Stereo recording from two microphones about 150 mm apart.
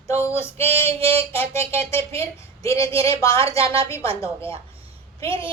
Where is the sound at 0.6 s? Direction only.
40° right (ahead or behind).